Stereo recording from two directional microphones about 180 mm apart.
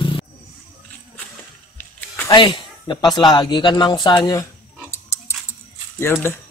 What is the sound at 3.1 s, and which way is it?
Speech, 25° left (ahead or behind).